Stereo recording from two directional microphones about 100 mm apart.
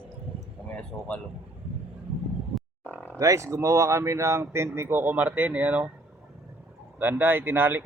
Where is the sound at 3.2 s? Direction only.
30° right (ahead or behind); by 5.9 s 15° right (ahead or behind).